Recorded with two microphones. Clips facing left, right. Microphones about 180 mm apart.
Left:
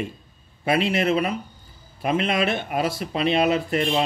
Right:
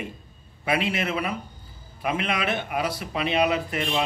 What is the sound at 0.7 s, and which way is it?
Speech, 45° left (ahead or behind).